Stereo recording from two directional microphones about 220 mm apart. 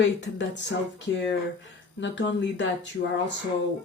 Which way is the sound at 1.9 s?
55° left (ahead or behind).